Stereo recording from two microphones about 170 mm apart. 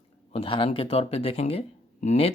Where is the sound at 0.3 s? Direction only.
30° left (ahead or behind).